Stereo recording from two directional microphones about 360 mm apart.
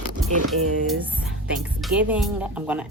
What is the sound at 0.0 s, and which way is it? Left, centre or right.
Speech, right.